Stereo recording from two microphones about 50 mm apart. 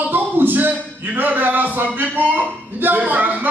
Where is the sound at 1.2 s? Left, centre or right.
Right.